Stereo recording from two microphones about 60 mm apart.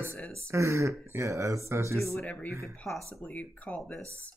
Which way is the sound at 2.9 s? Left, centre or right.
Centre.